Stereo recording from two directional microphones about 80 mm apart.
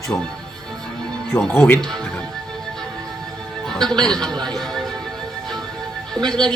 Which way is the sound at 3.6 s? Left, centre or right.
Centre.